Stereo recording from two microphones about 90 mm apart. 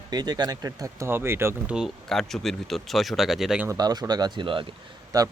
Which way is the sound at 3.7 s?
45° right (ahead or behind).